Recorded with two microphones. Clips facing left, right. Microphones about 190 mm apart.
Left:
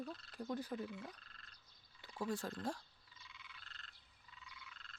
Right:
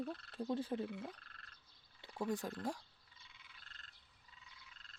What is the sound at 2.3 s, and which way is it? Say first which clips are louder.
Speech: right 2 dB; 15° right (ahead or behind).